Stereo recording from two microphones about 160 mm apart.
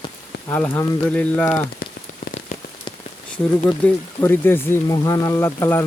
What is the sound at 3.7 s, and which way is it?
Speech, 10° left (ahead or behind).